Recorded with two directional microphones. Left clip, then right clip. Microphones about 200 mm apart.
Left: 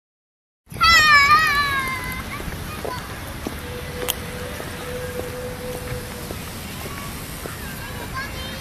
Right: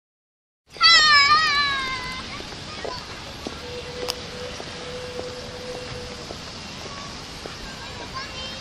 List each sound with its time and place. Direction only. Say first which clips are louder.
0.7 s cat: left 1 dB; 45° right (ahead or behind)